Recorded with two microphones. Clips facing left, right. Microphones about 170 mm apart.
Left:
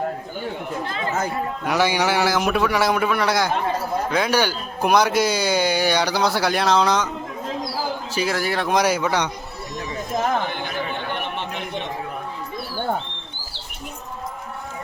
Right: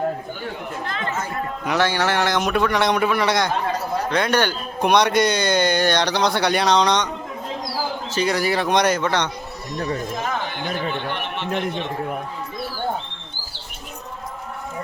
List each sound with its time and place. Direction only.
1.6 s speech: 10° left (ahead or behind)
8.1 s speech: 5° left (ahead or behind)